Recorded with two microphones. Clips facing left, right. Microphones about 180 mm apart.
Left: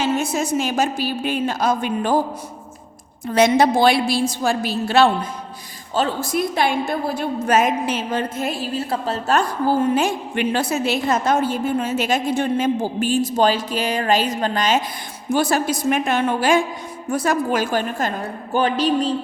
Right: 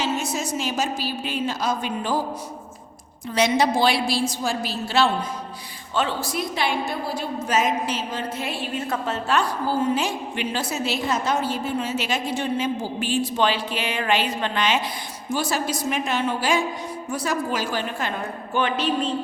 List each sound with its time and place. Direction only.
0.0 s a woman's voice: 55° left (ahead or behind)
3.2 s a woman's voice: 50° left (ahead or behind)
5.9 s a woman's voice: 40° left (ahead or behind)
15.3 s a woman's voice: 55° left (ahead or behind); by 19.1 s 35° left (ahead or behind)